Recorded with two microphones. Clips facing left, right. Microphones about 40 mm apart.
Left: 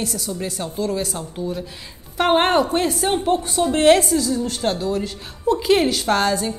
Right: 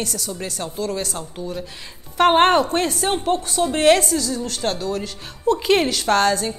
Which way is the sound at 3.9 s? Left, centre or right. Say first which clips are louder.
Left 2 dB; centre.